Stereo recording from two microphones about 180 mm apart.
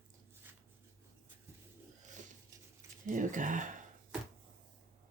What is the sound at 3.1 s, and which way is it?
Speech, 45° right (ahead or behind).